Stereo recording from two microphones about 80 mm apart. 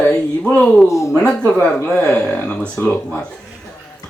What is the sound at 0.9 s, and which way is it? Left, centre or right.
Speech, left.